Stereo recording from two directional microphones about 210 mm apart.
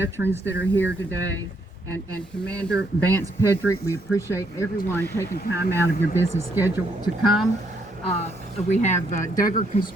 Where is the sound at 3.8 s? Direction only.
15° left (ahead or behind).